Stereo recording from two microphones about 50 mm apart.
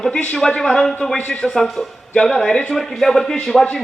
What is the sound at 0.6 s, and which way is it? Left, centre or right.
A man's voice, centre.